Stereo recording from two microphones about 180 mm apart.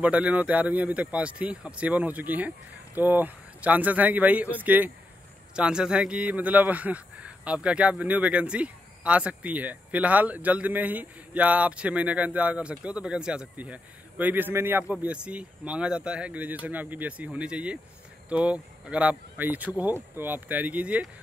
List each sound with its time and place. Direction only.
0.0 s speech: 5° right (ahead or behind)